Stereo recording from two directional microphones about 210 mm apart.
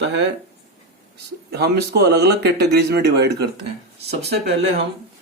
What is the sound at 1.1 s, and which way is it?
Speech, 50° right (ahead or behind).